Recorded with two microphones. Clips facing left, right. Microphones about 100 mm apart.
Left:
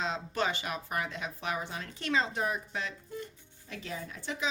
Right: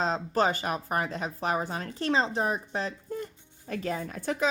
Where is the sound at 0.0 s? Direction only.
40° right (ahead or behind).